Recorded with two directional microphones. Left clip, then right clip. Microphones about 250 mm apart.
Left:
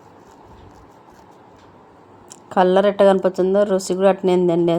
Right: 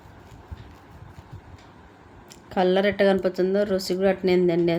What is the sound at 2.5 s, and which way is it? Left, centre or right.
Speech, centre.